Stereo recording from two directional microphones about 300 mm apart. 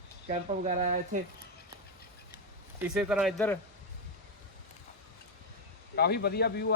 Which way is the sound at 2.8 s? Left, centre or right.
Centre.